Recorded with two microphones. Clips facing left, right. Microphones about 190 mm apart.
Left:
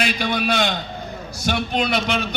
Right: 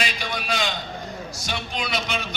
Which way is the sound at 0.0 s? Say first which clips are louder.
Left 7 dB; 60° left (ahead or behind).